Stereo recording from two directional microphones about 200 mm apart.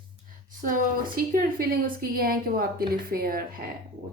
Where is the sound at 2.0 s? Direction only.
45° right (ahead or behind).